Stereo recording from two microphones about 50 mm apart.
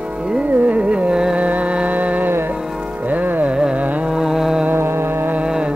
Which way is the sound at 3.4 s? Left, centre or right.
Centre.